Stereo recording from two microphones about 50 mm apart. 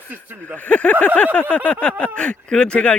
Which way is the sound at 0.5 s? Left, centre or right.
Left.